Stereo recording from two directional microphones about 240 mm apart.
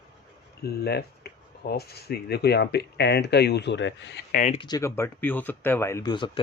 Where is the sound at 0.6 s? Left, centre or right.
Left.